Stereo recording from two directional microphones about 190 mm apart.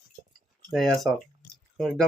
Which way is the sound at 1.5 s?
Centre (ahead or behind).